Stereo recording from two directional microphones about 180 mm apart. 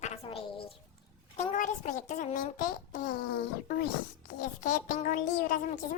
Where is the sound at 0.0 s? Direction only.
30° left (ahead or behind).